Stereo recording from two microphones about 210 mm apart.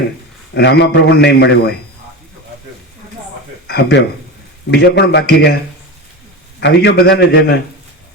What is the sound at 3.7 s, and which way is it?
A man's voice, 50° left (ahead or behind).